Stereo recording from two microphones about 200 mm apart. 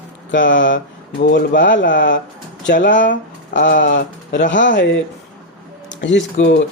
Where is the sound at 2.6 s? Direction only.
40° left (ahead or behind).